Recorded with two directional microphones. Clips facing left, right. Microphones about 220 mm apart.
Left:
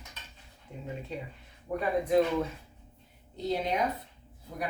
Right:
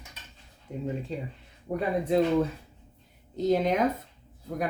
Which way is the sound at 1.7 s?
35° right (ahead or behind).